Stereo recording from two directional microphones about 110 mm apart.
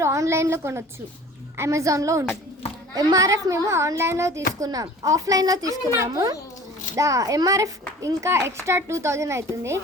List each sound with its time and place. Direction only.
0.0 s a child's voice: 25° right (ahead or behind)